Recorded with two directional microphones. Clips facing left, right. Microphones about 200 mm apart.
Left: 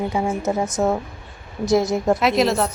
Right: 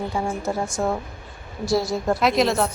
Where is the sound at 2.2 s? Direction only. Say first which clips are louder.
Left 1 dB; centre (ahead or behind).